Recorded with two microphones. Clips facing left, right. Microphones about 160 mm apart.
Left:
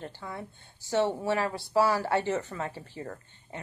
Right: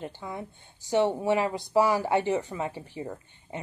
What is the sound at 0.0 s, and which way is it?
A woman's voice, 15° right (ahead or behind).